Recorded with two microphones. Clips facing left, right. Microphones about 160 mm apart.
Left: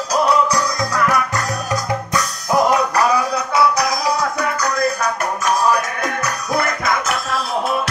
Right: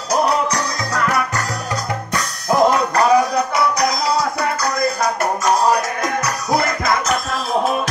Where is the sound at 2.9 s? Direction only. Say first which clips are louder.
Right 3 dB; 30° right (ahead or behind).